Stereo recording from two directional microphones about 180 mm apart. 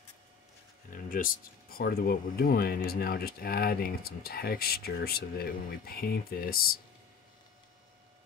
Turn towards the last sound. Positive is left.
turn(degrees=55)  # may be behind; listen again after turning